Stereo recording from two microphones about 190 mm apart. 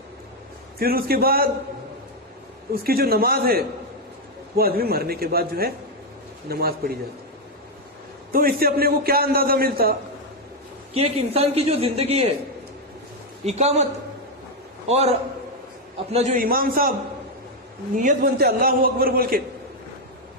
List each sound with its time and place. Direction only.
0.8 s a man's voice: 55° right (ahead or behind)
2.8 s a man's voice: 55° right (ahead or behind)
8.3 s a man's voice: 50° right (ahead or behind)
10.9 s speech: 30° right (ahead or behind)
13.4 s speech: 35° right (ahead or behind)
14.8 s a man's voice: 35° right (ahead or behind)
16.1 s a man's voice: 40° right (ahead or behind)
17.9 s a man's voice: 45° right (ahead or behind)